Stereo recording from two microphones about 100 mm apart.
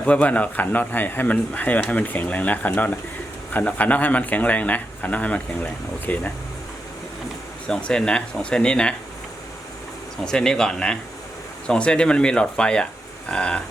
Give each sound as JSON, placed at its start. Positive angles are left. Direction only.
{"t": 0.0, "sound": "speech", "side_deg": 15}
{"t": 7.7, "sound": "speech", "side_deg": 10}
{"t": 10.2, "sound": "speech", "side_deg": 5}